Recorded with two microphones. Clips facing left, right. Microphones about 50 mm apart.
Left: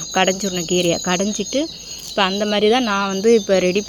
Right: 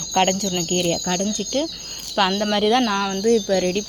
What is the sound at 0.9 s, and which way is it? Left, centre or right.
Speech, left.